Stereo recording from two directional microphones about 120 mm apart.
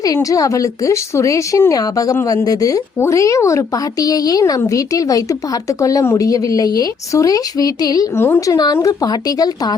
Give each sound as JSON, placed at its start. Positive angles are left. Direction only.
{"t": 0.0, "sound": "a woman's voice", "side_deg": 30}